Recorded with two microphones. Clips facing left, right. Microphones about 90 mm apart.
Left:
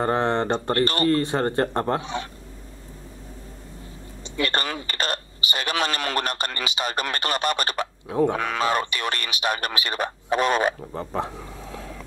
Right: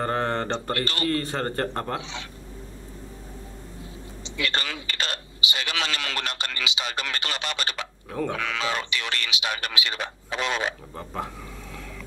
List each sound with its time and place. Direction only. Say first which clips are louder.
0.0 s speech: left 4 dB; 20° left (ahead or behind)
0.7 s a man's voice: left 9 dB; 40° left (ahead or behind)
1.1 s speech: left 5 dB; 20° left (ahead or behind)
2.0 s a man's voice: left 6 dB; 45° left (ahead or behind)
4.4 s a man's voice: left 4 dB; 45° left (ahead or behind)
10.9 s speech: left 5 dB; 30° left (ahead or behind)